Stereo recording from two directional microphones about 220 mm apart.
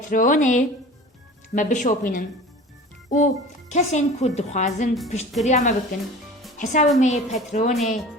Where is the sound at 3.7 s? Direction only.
35° left (ahead or behind).